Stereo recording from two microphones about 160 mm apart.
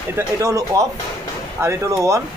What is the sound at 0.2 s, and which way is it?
Speech, 20° right (ahead or behind).